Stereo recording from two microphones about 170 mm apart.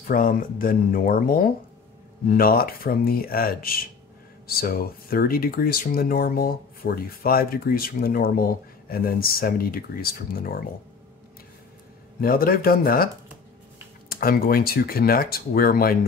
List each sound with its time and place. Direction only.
0.1 s speech: 55° left (ahead or behind)
12.2 s speech: 60° left (ahead or behind)